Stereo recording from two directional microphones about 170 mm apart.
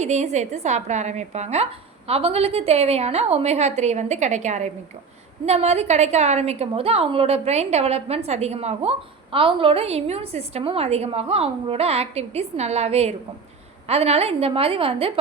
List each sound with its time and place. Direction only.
0.0 s a woman's voice: 40° right (ahead or behind)